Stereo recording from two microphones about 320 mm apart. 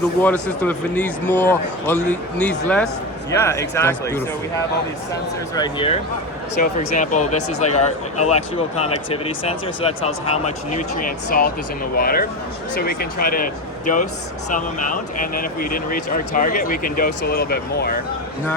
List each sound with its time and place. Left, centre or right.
0.2 s speech: centre; by 18.0 s left